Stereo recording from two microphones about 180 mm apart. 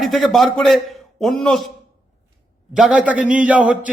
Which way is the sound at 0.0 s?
Centre (ahead or behind).